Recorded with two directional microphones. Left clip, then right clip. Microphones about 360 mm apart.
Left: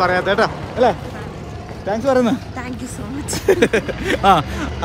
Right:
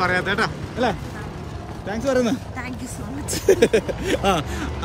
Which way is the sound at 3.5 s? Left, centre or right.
Centre.